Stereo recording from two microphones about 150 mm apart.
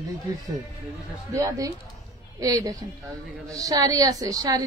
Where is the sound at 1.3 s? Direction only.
20° right (ahead or behind).